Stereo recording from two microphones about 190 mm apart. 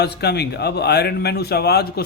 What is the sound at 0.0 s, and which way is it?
A man's voice, 60° left (ahead or behind).